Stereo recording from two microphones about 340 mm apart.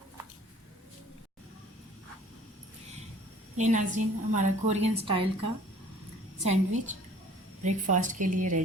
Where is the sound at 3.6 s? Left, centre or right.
Right.